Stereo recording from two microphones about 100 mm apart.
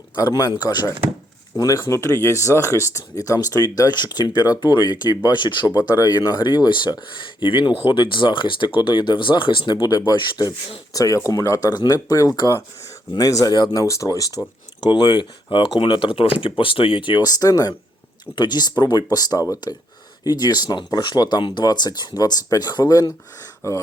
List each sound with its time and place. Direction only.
0.2 s speech: 40° left (ahead or behind)
5.7 s speech: 35° left (ahead or behind); by 9.7 s 55° left (ahead or behind)
9.7 s speech: 40° left (ahead or behind)
13.8 s speech: 30° left (ahead or behind)
14.8 s speech: 50° left (ahead or behind); by 23.8 s 30° left (ahead or behind)